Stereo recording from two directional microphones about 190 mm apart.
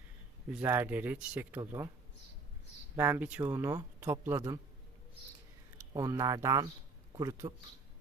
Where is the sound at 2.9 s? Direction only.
10° right (ahead or behind).